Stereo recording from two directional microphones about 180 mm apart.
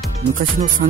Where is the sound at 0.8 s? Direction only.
45° right (ahead or behind).